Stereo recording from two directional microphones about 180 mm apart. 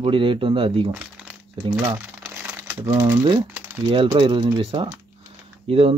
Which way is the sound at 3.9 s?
30° right (ahead or behind).